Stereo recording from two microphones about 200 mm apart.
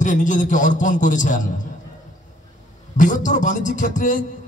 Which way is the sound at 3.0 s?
40° left (ahead or behind).